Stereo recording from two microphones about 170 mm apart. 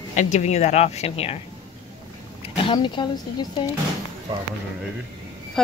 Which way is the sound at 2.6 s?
30° left (ahead or behind).